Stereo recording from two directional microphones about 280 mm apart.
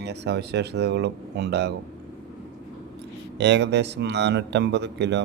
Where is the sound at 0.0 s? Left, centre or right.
Right.